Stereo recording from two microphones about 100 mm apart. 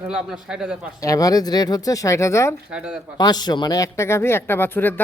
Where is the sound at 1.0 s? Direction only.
35° left (ahead or behind).